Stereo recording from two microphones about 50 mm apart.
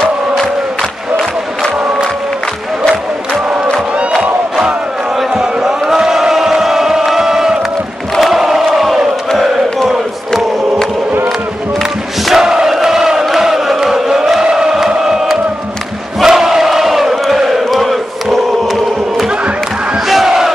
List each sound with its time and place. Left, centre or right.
4.6 s chant: centre
7.1 s crowd: centre
9.4 s chant: centre
11.8 s crowd: centre
12.7 s chant: centre
14.4 s chant: centre
16.2 s crowd: centre
20.1 s battle cry: centre